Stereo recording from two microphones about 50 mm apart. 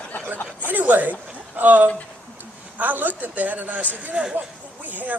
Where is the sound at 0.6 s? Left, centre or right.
Right.